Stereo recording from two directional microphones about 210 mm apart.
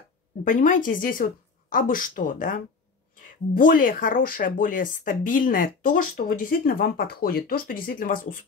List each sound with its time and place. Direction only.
0.5 s speech: 40° left (ahead or behind)